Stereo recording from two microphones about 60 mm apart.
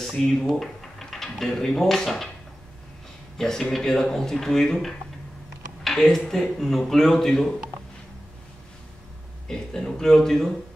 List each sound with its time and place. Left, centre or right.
0.0 s speech: centre
3.3 s speech: centre
9.5 s speech: centre